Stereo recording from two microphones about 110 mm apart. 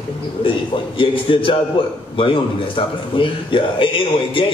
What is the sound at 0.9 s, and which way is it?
Speech, 50° left (ahead or behind).